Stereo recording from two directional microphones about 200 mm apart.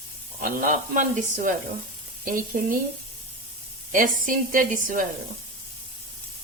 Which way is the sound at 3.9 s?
45° right (ahead or behind).